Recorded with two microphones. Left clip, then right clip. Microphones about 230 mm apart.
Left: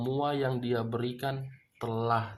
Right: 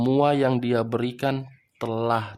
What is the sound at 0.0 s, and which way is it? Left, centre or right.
Speech, right.